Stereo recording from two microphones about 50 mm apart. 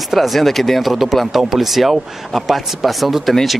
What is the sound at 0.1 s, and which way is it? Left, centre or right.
A man's voice, centre.